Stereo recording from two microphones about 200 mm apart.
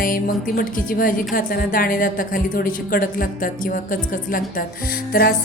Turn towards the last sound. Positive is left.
turn(degrees=50)  # may be behind; listen again after turning